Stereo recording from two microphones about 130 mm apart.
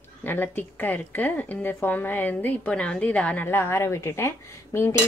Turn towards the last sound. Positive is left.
turn(degrees=20)  # may be behind; listen again after turning